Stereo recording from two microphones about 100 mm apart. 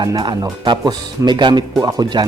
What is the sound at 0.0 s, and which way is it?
Speech, 45° right (ahead or behind).